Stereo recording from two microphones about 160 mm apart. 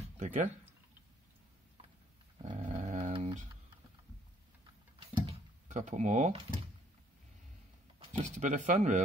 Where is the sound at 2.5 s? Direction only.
35° right (ahead or behind).